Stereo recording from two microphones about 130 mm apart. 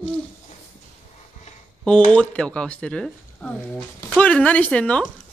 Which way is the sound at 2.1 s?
5° left (ahead or behind).